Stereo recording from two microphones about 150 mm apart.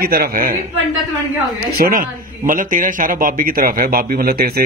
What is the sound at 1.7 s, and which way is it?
Speech, 70° right (ahead or behind).